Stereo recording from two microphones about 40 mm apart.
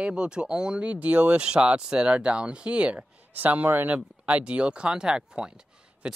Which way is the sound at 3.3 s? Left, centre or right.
Right.